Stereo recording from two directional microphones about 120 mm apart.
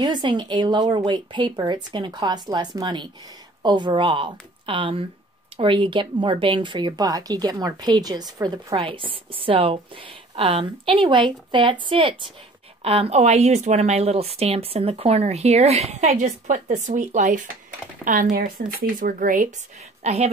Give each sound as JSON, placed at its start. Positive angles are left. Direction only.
{"t": 0.0, "sound": "speech", "side_deg": -40}
{"t": 8.7, "sound": "a woman's voice", "side_deg": -45}
{"t": 19.2, "sound": "speech", "side_deg": -90}
{"t": 20.0, "sound": "speech", "side_deg": -65}